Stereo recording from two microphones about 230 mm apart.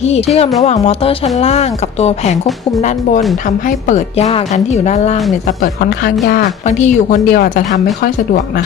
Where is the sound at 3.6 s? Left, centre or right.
Left.